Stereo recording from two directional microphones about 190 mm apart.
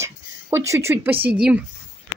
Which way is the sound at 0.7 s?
15° right (ahead or behind).